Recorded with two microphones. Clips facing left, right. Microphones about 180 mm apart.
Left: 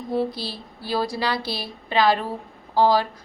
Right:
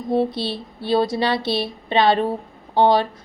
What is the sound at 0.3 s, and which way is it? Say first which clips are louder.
A woman's voice: right 6 dB; 25° right (ahead or behind).